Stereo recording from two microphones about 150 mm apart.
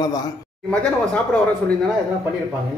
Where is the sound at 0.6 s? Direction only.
5° left (ahead or behind).